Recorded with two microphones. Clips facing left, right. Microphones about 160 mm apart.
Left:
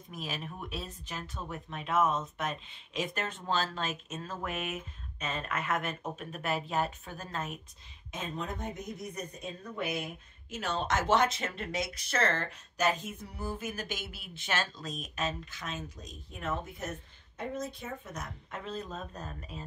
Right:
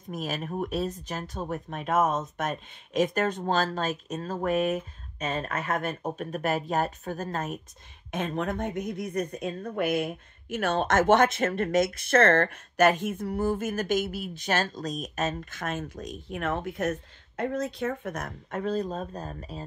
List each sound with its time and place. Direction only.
0.1 s speech: 45° right (ahead or behind)
8.1 s a woman's voice: 65° right (ahead or behind); by 9.5 s 85° right
9.6 s speech: 55° right (ahead or behind)
16.0 s a woman's voice: 75° right (ahead or behind)
18.1 s speech: 50° right (ahead or behind); by 19.6 s 35° right (ahead or behind)